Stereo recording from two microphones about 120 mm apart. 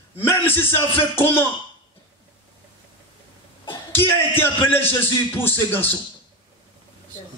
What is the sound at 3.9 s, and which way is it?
A man's voice, 20° left (ahead or behind).